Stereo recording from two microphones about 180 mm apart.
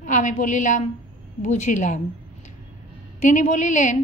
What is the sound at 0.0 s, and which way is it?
A woman's voice, 45° left (ahead or behind).